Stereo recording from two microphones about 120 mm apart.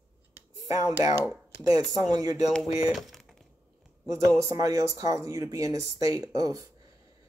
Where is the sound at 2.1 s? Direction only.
35° right (ahead or behind).